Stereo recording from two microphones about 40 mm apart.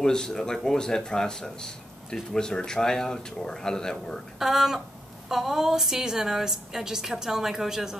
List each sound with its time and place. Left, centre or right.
0.0 s speech: centre
4.4 s a woman's voice: centre